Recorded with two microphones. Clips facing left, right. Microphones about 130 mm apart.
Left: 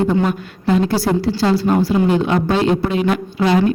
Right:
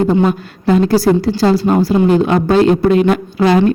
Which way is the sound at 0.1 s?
35° right (ahead or behind).